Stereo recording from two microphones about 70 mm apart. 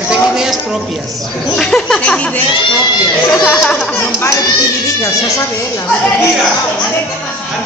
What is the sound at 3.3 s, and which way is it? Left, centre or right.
Speech, centre.